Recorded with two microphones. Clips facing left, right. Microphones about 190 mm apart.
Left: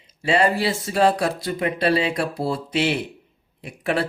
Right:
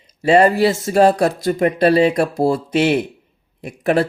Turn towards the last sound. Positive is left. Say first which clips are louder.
# right 7 dB
turn(degrees=-45)  # may be behind; listen again after turning